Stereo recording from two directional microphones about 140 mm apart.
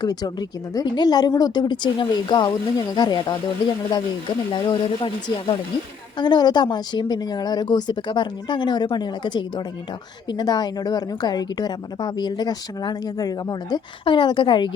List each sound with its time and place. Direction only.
0.0 s a woman's voice: 30° left (ahead or behind)
4.5 s a woman's voice: 35° left (ahead or behind)